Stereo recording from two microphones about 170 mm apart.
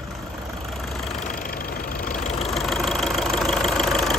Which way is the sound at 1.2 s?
60° left (ahead or behind).